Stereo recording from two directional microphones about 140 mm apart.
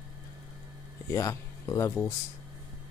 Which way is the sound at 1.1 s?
25° left (ahead or behind).